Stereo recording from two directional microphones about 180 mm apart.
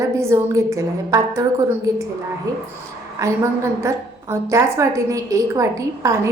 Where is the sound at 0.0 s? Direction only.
15° right (ahead or behind).